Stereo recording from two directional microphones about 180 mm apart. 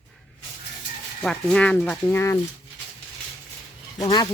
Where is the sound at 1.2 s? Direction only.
5° left (ahead or behind).